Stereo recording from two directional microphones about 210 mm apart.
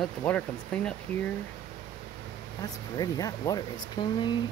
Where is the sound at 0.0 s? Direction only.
5° left (ahead or behind).